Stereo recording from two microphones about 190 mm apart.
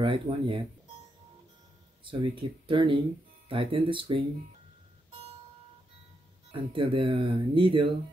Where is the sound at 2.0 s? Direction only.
25° right (ahead or behind).